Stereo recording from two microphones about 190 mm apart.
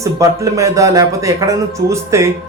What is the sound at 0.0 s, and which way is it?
A man's voice, 15° right (ahead or behind).